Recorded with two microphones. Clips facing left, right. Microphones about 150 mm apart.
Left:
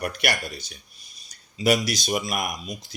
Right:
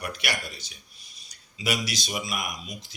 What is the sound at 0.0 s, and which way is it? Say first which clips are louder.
A man's voice: left 5 dB; 50° left (ahead or behind).